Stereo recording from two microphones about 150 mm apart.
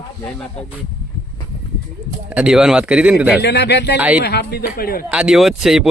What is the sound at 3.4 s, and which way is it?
Speech, 90° left.